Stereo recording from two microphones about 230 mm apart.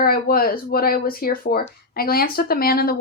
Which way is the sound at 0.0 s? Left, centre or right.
Left.